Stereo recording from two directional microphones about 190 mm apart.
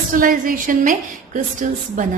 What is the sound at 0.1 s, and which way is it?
A woman's voice, 45° right (ahead or behind).